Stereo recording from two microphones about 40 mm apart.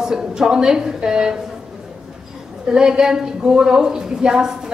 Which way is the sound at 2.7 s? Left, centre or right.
Centre.